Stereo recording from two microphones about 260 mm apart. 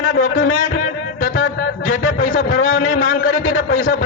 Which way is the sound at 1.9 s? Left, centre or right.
Left.